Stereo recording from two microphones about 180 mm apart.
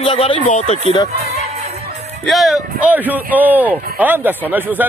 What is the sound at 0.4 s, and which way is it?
Speech, 40° left (ahead or behind).